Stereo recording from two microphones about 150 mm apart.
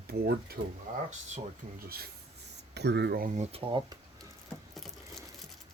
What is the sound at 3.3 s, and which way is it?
Speech, 45° right (ahead or behind).